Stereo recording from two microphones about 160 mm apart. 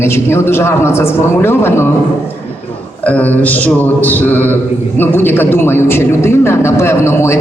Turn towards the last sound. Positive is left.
turn(degrees=15)  # may be behind; listen again after turning